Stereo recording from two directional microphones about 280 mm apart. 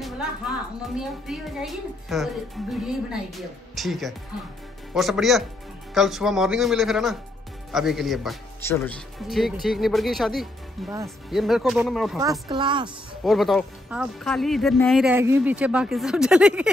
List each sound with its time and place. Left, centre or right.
0.9 s speech: centre
12.2 s speech: centre
12.8 s speech: centre